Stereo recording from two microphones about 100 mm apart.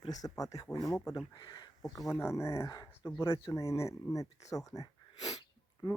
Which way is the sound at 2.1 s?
25° left (ahead or behind).